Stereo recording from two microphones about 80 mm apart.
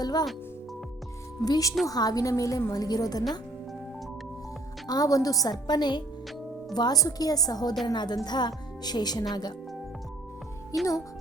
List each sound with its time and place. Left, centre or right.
0.0 s music: left
1.4 s a woman's voice: left
4.9 s a woman's voice: left
6.7 s a woman's voice: left
10.7 s a woman's voice: left